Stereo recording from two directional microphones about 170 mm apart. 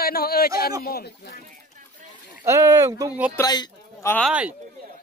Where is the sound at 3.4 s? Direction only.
20° left (ahead or behind).